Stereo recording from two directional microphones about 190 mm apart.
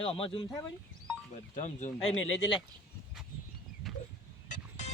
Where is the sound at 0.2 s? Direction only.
30° left (ahead or behind).